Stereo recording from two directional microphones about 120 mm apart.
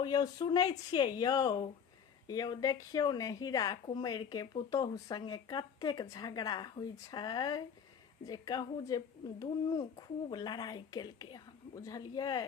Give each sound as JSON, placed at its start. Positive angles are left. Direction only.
{"t": 0.0, "sound": "speech", "side_deg": 35}